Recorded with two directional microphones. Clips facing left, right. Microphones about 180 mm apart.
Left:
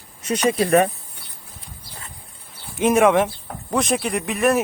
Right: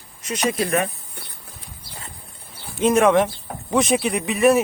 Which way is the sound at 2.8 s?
10° left (ahead or behind).